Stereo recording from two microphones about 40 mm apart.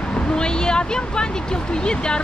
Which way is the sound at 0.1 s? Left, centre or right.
Left.